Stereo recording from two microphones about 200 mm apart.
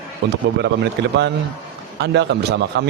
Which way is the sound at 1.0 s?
60° right (ahead or behind).